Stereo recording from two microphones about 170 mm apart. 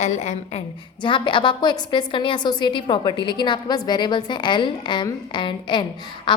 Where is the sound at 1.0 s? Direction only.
30° left (ahead or behind).